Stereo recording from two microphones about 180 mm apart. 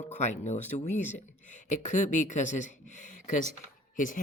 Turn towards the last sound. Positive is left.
turn(degrees=45)  # may be behind; listen again after turning